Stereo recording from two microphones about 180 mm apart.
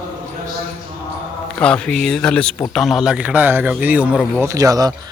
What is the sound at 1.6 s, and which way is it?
A man's voice, 5° left (ahead or behind).